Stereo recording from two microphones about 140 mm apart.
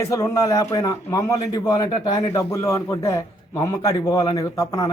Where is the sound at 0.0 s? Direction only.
25° left (ahead or behind).